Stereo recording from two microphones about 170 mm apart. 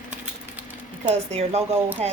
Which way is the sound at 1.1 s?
40° right (ahead or behind).